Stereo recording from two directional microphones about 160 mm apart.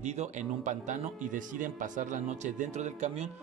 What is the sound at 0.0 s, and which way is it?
Speech, 45° right (ahead or behind).